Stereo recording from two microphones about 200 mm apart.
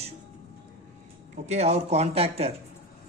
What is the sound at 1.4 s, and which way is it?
A man's voice, 35° right (ahead or behind).